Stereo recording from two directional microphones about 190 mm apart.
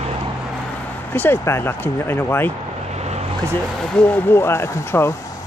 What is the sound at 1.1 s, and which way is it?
Speech, 10° left (ahead or behind).